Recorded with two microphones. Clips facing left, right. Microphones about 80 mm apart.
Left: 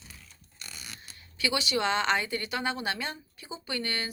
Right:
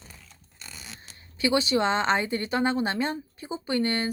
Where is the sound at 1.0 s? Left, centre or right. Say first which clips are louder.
Right 6 dB; right.